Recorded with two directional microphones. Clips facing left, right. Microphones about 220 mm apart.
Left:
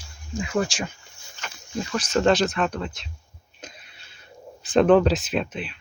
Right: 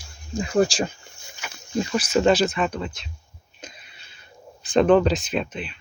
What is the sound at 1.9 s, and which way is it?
Speech, 10° right (ahead or behind).